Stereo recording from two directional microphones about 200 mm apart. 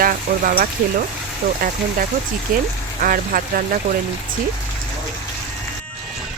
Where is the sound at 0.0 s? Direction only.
45° right (ahead or behind).